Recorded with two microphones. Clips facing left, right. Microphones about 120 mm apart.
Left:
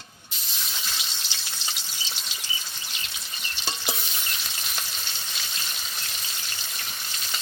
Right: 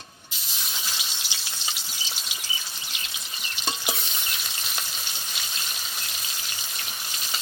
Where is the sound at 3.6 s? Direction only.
Centre (ahead or behind).